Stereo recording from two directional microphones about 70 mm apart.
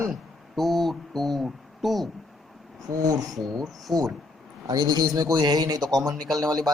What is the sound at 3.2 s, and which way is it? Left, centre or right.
Speech, centre.